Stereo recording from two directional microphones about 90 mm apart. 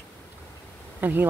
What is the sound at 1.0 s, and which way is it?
Speech, 20° right (ahead or behind).